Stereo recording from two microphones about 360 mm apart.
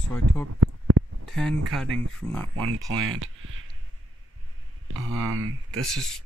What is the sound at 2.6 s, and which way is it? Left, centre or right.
Speech, right.